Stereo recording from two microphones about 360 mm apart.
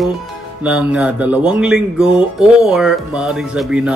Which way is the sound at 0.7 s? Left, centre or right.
Centre.